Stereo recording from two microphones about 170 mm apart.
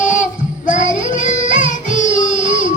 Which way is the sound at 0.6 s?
50° left (ahead or behind).